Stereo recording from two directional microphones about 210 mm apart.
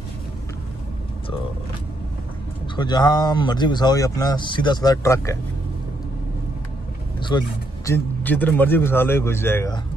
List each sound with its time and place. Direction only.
2.7 s speech: 20° left (ahead or behind)
7.2 s a man's voice: 20° left (ahead or behind)